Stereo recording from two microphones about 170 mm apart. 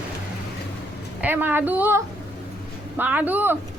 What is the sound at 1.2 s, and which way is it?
Speech, 10° right (ahead or behind).